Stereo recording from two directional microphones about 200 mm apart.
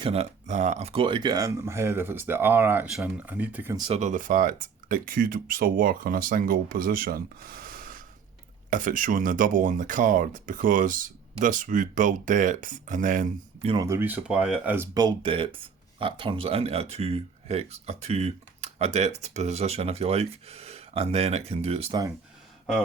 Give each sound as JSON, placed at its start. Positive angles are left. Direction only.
{"t": 0.0, "sound": "speech", "side_deg": -30}
{"t": 3.8, "sound": "speech", "side_deg": -30}
{"t": 13.7, "sound": "speech", "side_deg": -15}
{"t": 14.9, "sound": "speech", "side_deg": -25}